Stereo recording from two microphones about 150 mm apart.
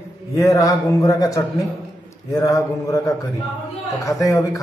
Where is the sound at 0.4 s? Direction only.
20° left (ahead or behind).